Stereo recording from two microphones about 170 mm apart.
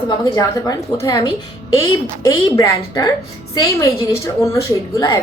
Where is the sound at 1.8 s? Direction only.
20° left (ahead or behind).